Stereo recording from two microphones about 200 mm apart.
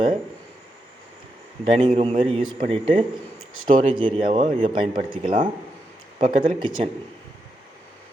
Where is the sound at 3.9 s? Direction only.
25° right (ahead or behind).